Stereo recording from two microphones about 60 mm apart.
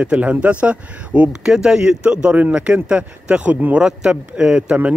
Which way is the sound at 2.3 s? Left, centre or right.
Right.